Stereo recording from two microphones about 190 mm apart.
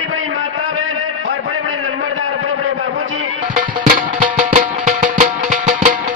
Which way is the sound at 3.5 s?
45° right (ahead or behind).